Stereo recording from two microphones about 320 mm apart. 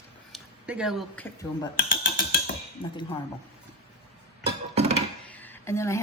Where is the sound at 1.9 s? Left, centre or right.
Left.